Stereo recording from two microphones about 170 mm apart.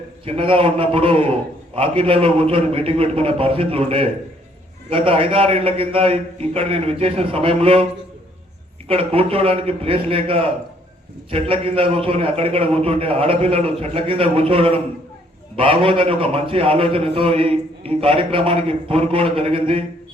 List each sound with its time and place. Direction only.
0.3 s a man's voice: 30° right (ahead or behind)
8.9 s a man's voice: 30° right (ahead or behind)